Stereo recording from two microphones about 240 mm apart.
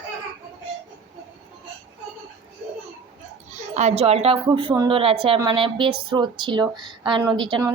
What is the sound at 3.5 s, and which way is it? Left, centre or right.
A woman's voice, right.